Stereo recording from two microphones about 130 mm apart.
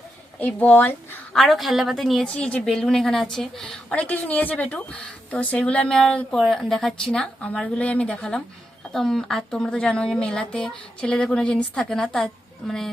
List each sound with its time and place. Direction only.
0.3 s speech: 10° left (ahead or behind)
1.4 s a woman's voice: centre (ahead or behind)